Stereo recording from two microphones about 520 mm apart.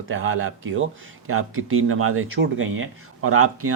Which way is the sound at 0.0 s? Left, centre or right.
Right.